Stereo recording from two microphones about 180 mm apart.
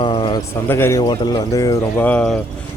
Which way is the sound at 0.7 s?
15° left (ahead or behind).